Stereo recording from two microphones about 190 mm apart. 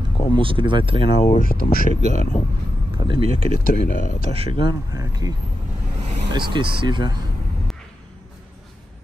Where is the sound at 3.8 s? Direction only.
45° left (ahead or behind).